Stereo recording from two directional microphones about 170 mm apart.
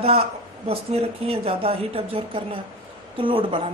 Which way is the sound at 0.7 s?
35° right (ahead or behind).